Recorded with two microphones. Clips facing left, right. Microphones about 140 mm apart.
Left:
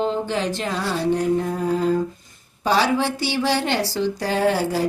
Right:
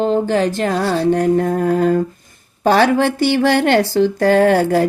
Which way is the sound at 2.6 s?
55° right (ahead or behind).